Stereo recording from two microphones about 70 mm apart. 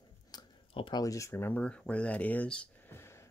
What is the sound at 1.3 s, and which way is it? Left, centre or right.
Speech, left.